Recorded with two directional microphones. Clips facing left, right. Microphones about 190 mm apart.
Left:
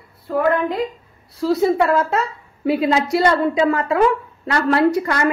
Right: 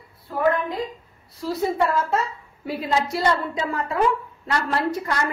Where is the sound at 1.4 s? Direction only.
70° left (ahead or behind).